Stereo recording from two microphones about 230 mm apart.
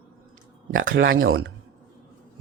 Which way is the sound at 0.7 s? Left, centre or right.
Right.